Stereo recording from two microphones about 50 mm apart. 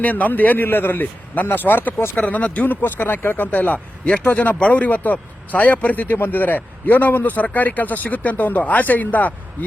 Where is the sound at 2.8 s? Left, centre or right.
Left.